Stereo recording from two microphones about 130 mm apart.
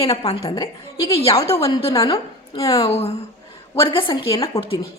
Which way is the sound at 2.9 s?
50° left (ahead or behind).